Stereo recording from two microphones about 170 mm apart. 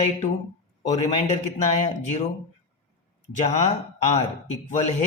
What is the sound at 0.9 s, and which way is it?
Speech, 40° left (ahead or behind).